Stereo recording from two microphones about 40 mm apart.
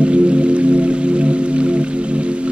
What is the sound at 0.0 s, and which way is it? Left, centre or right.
Music, right.